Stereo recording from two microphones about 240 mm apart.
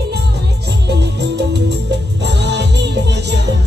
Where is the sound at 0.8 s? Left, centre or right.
Right.